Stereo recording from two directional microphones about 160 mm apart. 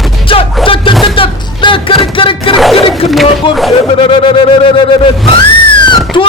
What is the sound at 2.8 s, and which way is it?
Chatter, 35° left (ahead or behind).